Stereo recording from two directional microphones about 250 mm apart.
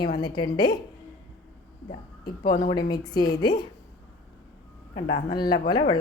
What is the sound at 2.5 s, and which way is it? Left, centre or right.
A woman's voice, centre.